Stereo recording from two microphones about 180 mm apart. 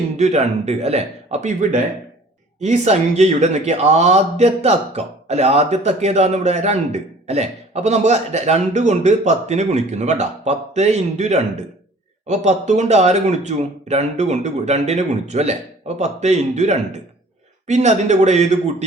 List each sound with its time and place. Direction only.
0.2 s speech: 40° right (ahead or behind)